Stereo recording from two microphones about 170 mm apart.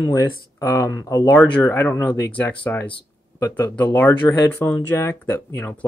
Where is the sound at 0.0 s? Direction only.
20° left (ahead or behind).